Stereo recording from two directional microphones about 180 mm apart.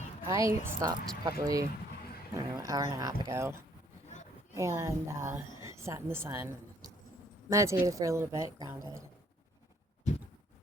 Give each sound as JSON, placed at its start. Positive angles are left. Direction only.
{"t": 0.3, "sound": "a woman's voice", "side_deg": -15}
{"t": 5.5, "sound": "a sound", "side_deg": -15}
{"t": 7.5, "sound": "a woman's voice", "side_deg": -15}